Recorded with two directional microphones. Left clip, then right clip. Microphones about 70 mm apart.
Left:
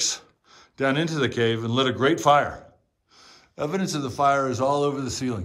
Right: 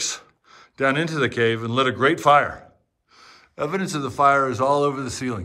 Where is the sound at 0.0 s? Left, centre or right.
Left.